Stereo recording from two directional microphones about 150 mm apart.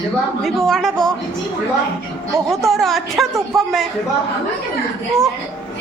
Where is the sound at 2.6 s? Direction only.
Centre (ahead or behind).